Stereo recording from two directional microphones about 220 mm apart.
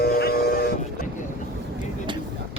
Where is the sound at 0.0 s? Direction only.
45° left (ahead or behind).